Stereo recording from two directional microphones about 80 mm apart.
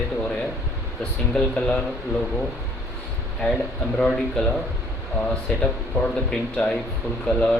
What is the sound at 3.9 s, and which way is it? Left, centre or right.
Speech, centre.